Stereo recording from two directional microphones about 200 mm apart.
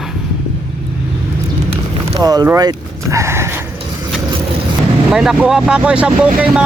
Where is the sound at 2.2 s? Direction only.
20° right (ahead or behind).